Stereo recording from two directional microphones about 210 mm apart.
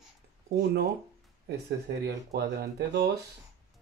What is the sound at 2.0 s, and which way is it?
Speech, 50° right (ahead or behind).